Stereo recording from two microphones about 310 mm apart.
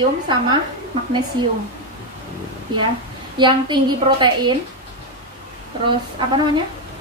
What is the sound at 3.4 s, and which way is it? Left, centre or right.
A woman's voice, centre.